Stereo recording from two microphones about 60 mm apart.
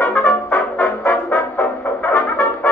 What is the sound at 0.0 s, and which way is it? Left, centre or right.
Brass instrument, left.